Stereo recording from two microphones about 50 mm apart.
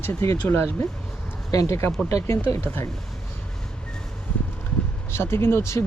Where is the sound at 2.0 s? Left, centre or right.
Left.